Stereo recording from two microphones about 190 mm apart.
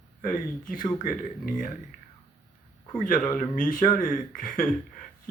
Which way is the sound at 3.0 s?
45° left (ahead or behind).